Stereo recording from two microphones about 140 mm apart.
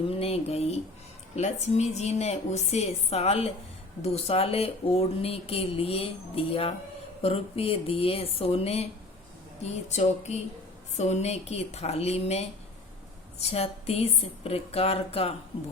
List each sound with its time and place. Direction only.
0.0 s speech: 45° left (ahead or behind)